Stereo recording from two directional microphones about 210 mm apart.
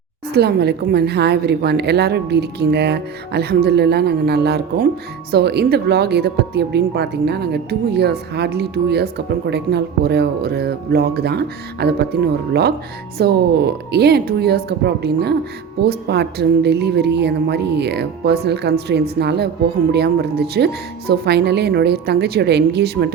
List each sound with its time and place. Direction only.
0.3 s speech: 50° right (ahead or behind)